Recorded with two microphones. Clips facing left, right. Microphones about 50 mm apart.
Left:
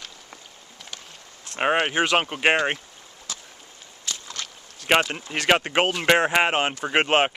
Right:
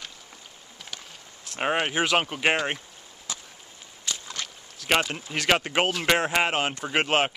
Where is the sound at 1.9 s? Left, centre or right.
Centre.